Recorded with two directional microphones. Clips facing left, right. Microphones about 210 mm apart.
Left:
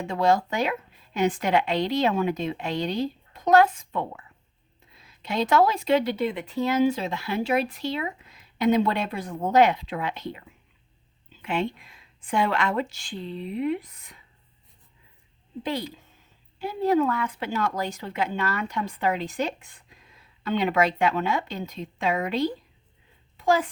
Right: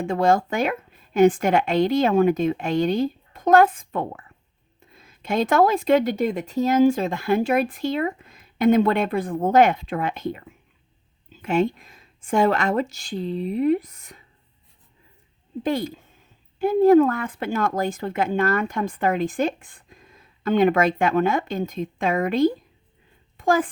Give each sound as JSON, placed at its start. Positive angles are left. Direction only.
{"t": 0.0, "sound": "a woman's voice", "side_deg": -50}
{"t": 15.6, "sound": "a woman's voice", "side_deg": -50}